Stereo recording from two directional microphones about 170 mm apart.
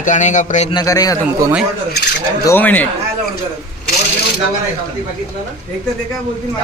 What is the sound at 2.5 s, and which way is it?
Speech, 10° left (ahead or behind).